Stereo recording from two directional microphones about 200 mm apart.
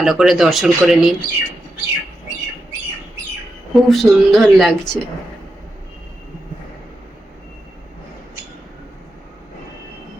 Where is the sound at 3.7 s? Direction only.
Centre (ahead or behind).